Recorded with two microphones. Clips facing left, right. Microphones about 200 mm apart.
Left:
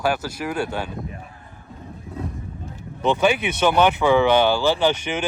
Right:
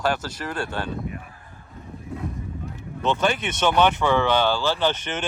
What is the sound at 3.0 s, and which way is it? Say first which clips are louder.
Speech: left 4 dB; 15° left (ahead or behind).